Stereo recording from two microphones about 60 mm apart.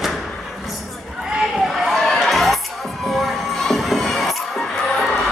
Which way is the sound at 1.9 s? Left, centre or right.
Centre.